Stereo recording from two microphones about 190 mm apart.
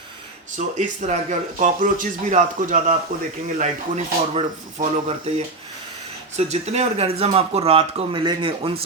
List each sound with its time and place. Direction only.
0.8 s speech: 40° right (ahead or behind)
6.3 s speech: 35° right (ahead or behind)